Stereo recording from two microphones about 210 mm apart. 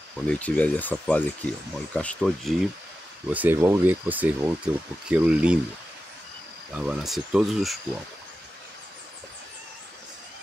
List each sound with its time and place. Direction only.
0.3 s speech: 5° left (ahead or behind)
6.7 s speech: 5° right (ahead or behind)